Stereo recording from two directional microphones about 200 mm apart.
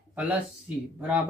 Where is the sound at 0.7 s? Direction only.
5° right (ahead or behind).